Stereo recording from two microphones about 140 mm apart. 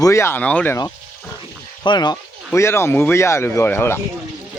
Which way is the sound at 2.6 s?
20° left (ahead or behind).